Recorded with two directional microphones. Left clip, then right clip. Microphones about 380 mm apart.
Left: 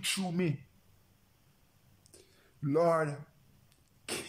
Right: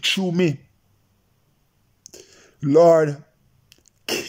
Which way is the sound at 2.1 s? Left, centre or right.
Right.